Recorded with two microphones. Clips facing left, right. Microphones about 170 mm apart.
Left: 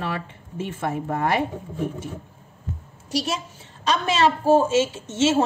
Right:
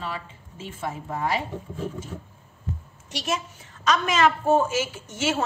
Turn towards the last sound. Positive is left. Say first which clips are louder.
# left 6 dB
turn(degrees=25)  # may be behind; listen again after turning